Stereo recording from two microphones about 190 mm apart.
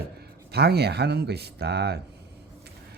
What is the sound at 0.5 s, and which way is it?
Speech, 60° right (ahead or behind).